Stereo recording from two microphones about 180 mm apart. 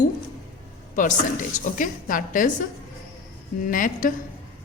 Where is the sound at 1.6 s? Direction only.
45° left (ahead or behind).